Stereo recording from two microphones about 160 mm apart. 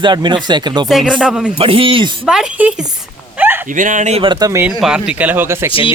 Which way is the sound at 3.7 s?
55° right (ahead or behind).